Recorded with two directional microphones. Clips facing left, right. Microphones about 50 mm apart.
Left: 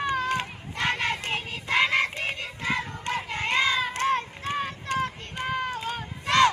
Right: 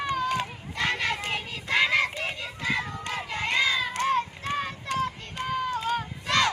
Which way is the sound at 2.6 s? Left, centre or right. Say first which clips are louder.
Even; left.